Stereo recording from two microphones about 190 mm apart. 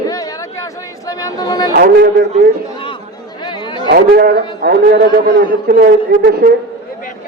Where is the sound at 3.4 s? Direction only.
25° left (ahead or behind).